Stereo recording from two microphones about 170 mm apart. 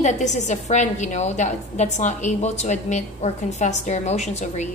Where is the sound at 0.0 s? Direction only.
45° left (ahead or behind).